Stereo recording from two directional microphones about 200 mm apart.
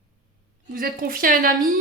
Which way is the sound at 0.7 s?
45° right (ahead or behind).